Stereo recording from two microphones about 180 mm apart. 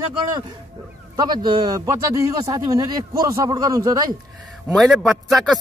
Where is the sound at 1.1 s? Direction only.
25° right (ahead or behind).